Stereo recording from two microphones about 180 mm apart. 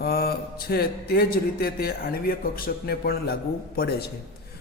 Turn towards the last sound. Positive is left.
turn(degrees=55)  # may be behind; listen again after turning